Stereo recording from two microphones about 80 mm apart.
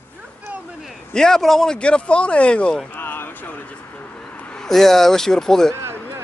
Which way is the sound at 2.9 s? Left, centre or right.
Left.